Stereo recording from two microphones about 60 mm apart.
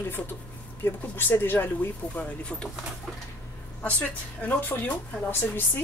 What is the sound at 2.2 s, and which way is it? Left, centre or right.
Speech, centre.